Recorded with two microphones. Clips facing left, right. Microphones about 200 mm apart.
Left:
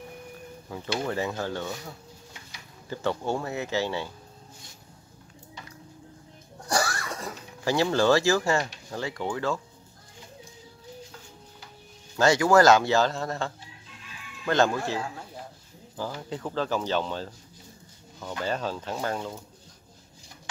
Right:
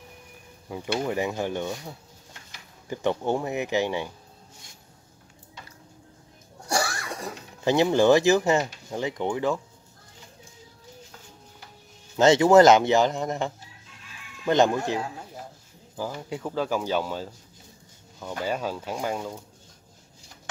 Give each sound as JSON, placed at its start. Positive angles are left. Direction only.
{"t": 0.7, "sound": "speech", "side_deg": -15}
{"t": 6.7, "sound": "speech", "side_deg": -10}
{"t": 12.2, "sound": "a man's voice", "side_deg": -20}
{"t": 18.4, "sound": "speech", "side_deg": -10}